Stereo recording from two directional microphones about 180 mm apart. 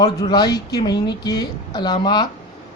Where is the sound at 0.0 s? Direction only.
20° left (ahead or behind).